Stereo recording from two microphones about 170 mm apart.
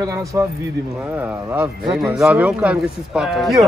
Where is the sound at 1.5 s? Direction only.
5° right (ahead or behind).